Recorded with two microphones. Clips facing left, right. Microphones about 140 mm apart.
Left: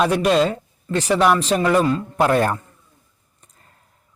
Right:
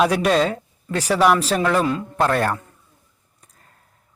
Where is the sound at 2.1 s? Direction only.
10° left (ahead or behind).